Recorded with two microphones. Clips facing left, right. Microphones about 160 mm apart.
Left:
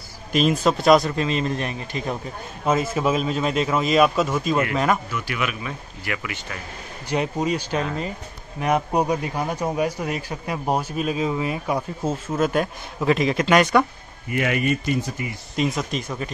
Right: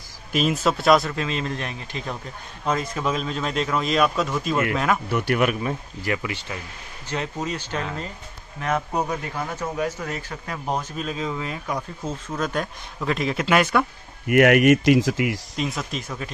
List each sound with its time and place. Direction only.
0.3 s speech: 5° right (ahead or behind)
5.1 s speech: 55° right (ahead or behind); by 6.4 s 30° right (ahead or behind)
7.1 s speech: 15° left (ahead or behind); by 13.8 s 5° right (ahead or behind)
14.2 s speech: 70° right (ahead or behind); by 15.3 s 90° right
15.5 s speech: centre (ahead or behind)